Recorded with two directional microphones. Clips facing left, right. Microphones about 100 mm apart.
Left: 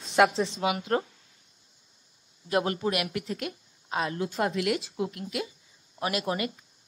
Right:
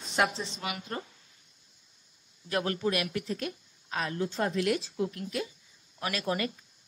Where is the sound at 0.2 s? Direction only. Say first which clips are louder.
Left 7 dB; 90° left.